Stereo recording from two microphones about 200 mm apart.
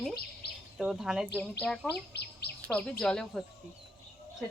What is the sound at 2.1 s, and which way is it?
Speech, 55° left (ahead or behind).